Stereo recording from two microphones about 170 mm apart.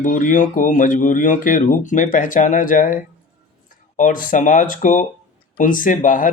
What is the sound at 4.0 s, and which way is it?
Speech, 50° left (ahead or behind).